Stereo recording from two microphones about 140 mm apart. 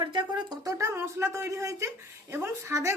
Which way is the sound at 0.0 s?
35° right (ahead or behind).